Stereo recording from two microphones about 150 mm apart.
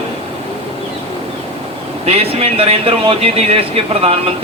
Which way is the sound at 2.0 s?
40° right (ahead or behind).